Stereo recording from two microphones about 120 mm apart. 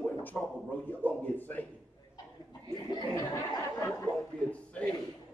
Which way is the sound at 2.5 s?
35° left (ahead or behind).